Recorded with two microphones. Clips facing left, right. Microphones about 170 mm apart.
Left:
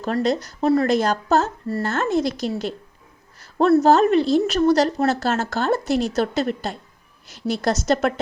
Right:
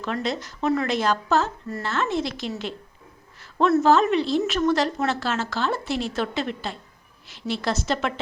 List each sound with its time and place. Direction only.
0.0 s speech: 40° left (ahead or behind)